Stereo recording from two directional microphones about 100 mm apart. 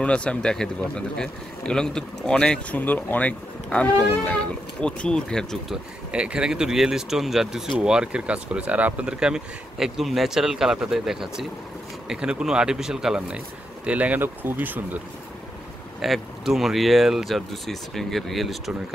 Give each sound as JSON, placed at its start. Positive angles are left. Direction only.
{"t": 0.0, "sound": "speech", "side_deg": 10}
{"t": 6.1, "sound": "speech", "side_deg": -10}
{"t": 16.0, "sound": "speech", "side_deg": -5}